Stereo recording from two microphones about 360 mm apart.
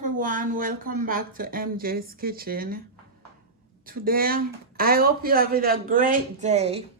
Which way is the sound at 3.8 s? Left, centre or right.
Right.